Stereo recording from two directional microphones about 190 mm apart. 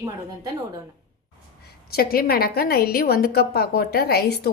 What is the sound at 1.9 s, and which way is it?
A woman's voice, 50° left (ahead or behind).